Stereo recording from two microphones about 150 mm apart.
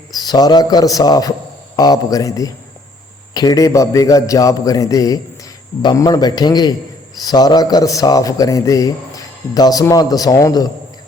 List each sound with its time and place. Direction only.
0.2 s a man's voice: 25° left (ahead or behind)